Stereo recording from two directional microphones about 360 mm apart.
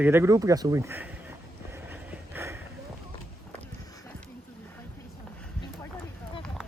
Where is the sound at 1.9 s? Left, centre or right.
Centre.